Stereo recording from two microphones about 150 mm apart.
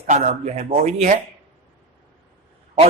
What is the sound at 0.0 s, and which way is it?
A man's voice, 50° right (ahead or behind).